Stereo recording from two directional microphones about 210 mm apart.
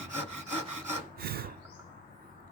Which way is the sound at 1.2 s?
45° right (ahead or behind).